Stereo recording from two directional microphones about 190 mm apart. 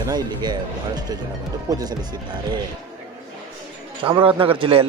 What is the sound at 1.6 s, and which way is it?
Speech, 20° right (ahead or behind).